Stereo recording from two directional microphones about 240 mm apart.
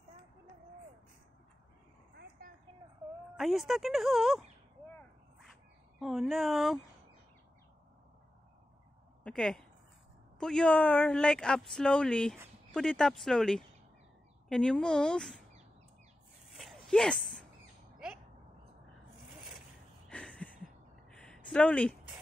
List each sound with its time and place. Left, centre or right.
2.1 s vehicle: right
3.3 s speech: centre
5.9 s speech: centre
9.2 s speech: centre
16.5 s a sound: centre
17.9 s bird: centre
20.1 s a sound: centre